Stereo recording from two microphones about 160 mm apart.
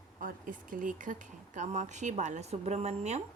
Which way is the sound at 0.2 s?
60° right (ahead or behind).